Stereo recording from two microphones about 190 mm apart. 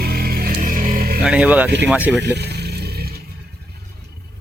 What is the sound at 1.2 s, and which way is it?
Speech, 5° right (ahead or behind).